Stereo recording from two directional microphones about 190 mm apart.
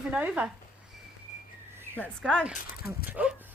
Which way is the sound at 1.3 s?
40° left (ahead or behind).